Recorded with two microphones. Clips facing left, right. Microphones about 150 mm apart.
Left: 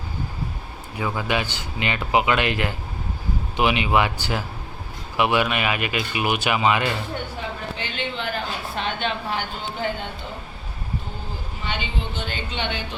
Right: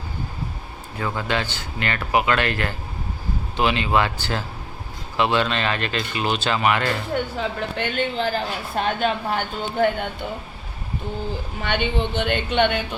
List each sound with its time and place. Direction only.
0.9 s speech: 10° left (ahead or behind)
7.8 s a woman's voice: 40° right (ahead or behind); by 10.1 s 60° right (ahead or behind)
11.6 s a woman's voice: 65° right (ahead or behind)